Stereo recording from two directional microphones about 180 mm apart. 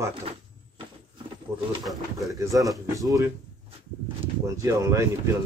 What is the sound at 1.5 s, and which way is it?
Speech, 15° right (ahead or behind).